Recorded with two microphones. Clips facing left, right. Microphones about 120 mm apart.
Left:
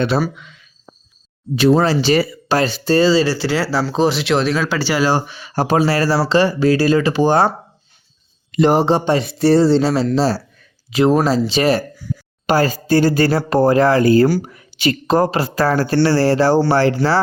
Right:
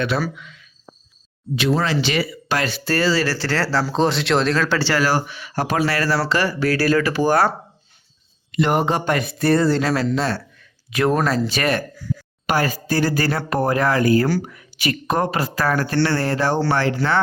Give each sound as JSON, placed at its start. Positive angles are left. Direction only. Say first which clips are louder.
{"t": 0.3, "sound": "speech", "louder": "even", "side_deg": 30}
{"t": 1.8, "sound": "speech", "louder": "left 6 dB", "side_deg": 35}
{"t": 4.9, "sound": "speech", "louder": "left 3 dB", "side_deg": 25}
{"t": 8.5, "sound": "speech", "louder": "left 5 dB", "side_deg": 35}
{"t": 10.2, "sound": "a sound", "louder": "left 6 dB", "side_deg": 35}
{"t": 11.3, "sound": "speech", "louder": "left 5 dB", "side_deg": 30}